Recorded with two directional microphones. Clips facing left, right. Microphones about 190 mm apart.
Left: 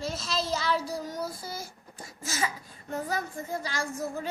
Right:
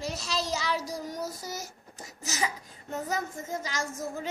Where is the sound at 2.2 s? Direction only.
20° right (ahead or behind).